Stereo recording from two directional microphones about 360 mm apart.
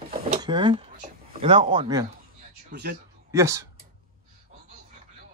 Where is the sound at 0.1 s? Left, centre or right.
Centre.